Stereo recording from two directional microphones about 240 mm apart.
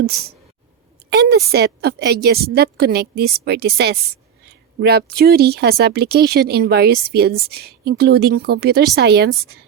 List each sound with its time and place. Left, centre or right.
1.1 s speech: right